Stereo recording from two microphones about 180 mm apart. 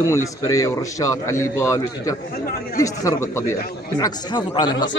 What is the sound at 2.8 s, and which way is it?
Speech, 20° left (ahead or behind).